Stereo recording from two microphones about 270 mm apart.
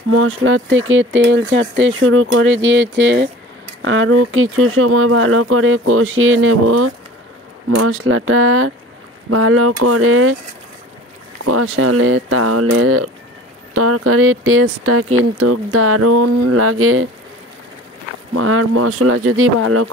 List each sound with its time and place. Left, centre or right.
0.1 s speech: right
11.4 s speech: right
18.3 s speech: right